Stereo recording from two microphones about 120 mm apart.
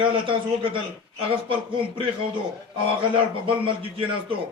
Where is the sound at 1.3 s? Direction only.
45° right (ahead or behind).